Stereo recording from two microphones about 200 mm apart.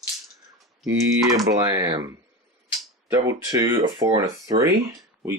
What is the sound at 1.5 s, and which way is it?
Speech, 15° right (ahead or behind).